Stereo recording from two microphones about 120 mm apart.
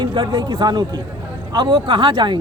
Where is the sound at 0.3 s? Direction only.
40° right (ahead or behind).